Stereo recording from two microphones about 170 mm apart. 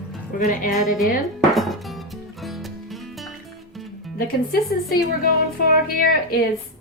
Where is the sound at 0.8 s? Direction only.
Centre (ahead or behind).